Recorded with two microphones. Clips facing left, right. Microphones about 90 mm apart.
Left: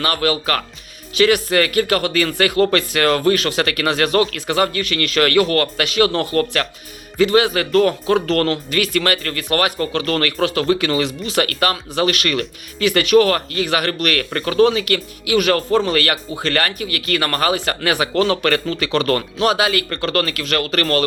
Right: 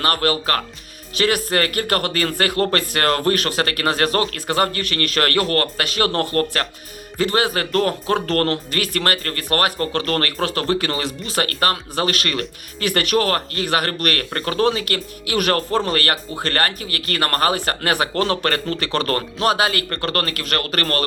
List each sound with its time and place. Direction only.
0.0 s speech: 45° right (ahead or behind)
12.8 s speech: 45° right (ahead or behind)